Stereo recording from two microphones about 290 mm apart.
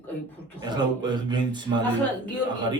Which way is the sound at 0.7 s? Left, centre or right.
Centre.